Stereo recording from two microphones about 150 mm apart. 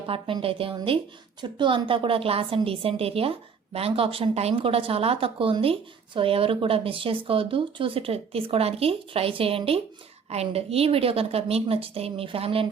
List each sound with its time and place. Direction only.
0.1 s a woman's voice: 35° right (ahead or behind)